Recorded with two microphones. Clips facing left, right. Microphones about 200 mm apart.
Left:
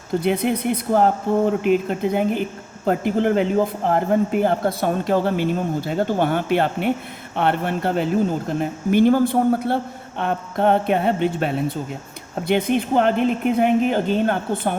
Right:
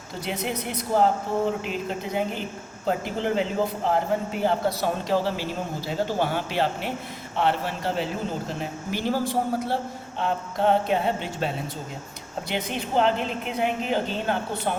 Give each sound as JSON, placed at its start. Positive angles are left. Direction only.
{"t": 0.2, "sound": "speech", "side_deg": 55}